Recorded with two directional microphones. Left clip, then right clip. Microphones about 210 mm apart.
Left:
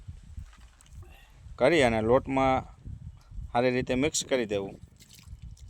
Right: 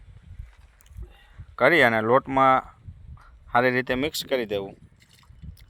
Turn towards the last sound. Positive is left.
turn(degrees=0)  # may be behind; listen again after turning